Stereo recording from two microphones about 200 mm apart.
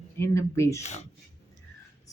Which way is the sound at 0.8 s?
35° left (ahead or behind).